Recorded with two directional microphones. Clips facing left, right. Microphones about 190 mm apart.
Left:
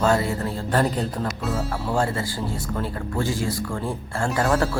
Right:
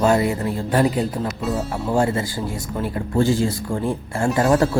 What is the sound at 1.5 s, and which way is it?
Speech, 20° right (ahead or behind).